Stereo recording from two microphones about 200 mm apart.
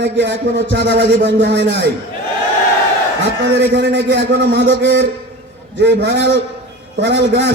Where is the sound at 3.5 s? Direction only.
60° right (ahead or behind).